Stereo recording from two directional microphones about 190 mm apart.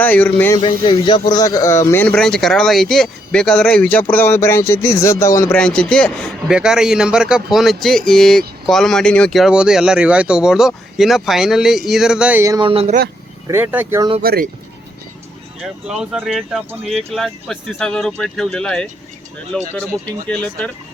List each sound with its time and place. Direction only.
0.0 s speech: 10° left (ahead or behind)
0.5 s speech: 25° left (ahead or behind); by 13.0 s 30° right (ahead or behind)
13.5 s speech: 10° right (ahead or behind)
14.2 s speech: 50° right (ahead or behind)
15.6 s speech: 5° right (ahead or behind)